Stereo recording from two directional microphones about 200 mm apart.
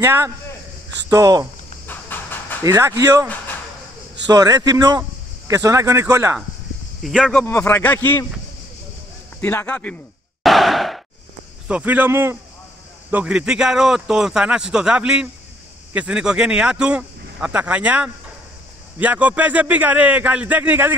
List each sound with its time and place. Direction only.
0.0 s a man's voice: 10° right (ahead or behind)
1.9 s train: 10° left (ahead or behind)
2.6 s a man's voice: 15° right (ahead or behind)
4.3 s a man's voice: 20° right (ahead or behind)
7.0 s speech: centre (ahead or behind)
9.4 s speech: 10° left (ahead or behind)
10.4 s sigh: centre (ahead or behind)
11.6 s a man's voice: 5° right (ahead or behind)